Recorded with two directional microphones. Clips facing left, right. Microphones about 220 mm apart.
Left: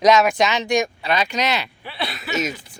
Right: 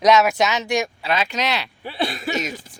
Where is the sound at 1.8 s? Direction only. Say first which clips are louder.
Right 5 dB; 45° right (ahead or behind).